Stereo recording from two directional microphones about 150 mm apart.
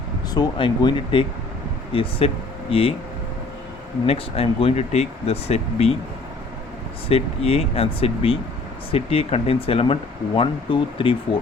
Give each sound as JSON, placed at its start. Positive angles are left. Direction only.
{"t": 0.3, "sound": "speech", "side_deg": 30}
{"t": 4.0, "sound": "speech", "side_deg": 40}
{"t": 7.1, "sound": "speech", "side_deg": 40}